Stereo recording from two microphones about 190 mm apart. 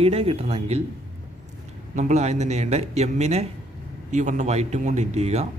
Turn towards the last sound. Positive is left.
turn(degrees=-35)  # may be behind; listen again after turning